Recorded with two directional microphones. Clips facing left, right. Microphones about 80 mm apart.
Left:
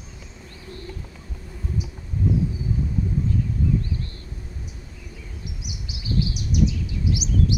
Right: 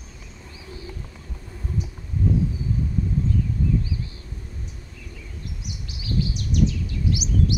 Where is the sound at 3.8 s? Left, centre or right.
Centre.